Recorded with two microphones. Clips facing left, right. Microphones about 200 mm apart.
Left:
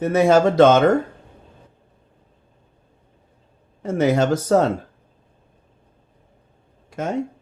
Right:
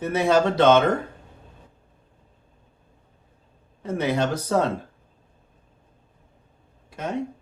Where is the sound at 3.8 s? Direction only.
45° left (ahead or behind).